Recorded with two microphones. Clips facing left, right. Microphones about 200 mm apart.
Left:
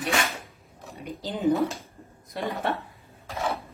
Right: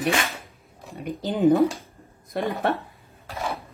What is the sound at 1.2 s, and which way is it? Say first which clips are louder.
Speech: right 6 dB; 50° right (ahead or behind).